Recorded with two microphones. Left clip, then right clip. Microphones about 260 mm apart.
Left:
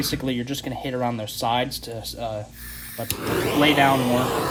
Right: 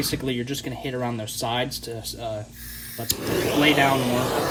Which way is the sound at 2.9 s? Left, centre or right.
Left.